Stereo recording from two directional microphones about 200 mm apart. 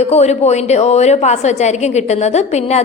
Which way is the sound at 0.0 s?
30° left (ahead or behind).